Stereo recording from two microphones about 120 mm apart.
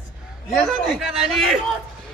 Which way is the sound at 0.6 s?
Centre (ahead or behind).